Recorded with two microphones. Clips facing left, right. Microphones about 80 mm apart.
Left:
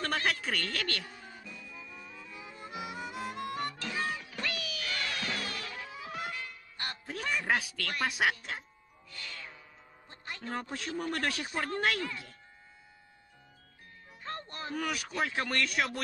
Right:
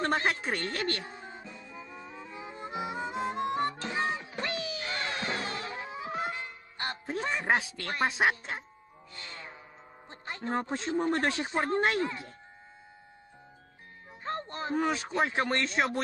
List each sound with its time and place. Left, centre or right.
0.0 s music: right
10.0 s speech: right
14.2 s speech: right